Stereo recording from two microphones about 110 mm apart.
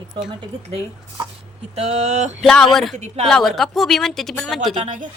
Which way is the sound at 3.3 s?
Centre (ahead or behind).